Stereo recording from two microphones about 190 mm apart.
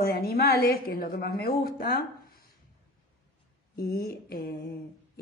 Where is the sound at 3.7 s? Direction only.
50° left (ahead or behind).